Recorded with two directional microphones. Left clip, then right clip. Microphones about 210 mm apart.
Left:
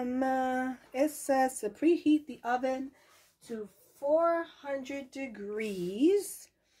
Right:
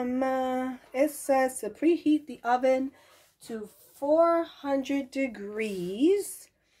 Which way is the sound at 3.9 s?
50° right (ahead or behind).